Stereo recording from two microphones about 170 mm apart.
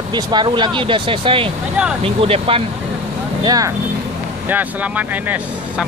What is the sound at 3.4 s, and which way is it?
Speech, 20° right (ahead or behind).